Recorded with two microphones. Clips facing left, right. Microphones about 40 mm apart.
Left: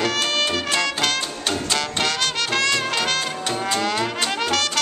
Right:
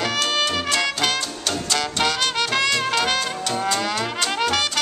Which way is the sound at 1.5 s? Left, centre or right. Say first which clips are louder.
Even; centre.